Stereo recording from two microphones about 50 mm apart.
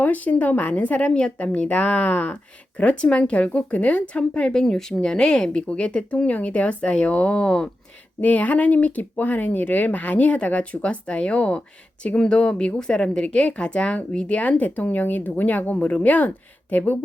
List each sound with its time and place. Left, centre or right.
0.0 s speech: left
4.5 s speech: centre
8.2 s speech: left